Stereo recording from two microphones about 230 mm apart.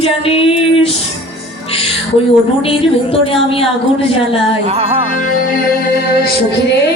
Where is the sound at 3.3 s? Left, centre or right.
Left.